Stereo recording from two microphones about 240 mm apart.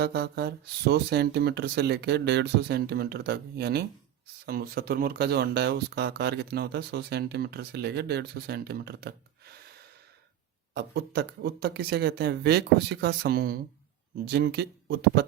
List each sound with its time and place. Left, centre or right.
0.0 s speech: right
10.8 s speech: right